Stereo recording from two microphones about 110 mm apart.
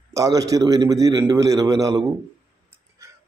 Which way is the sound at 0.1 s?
30° right (ahead or behind).